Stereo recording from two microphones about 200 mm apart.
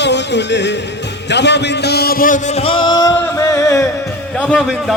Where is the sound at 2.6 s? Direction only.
25° left (ahead or behind).